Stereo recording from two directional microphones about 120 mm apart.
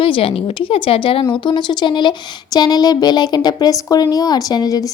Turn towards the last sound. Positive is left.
turn(degrees=30)  # may be behind; listen again after turning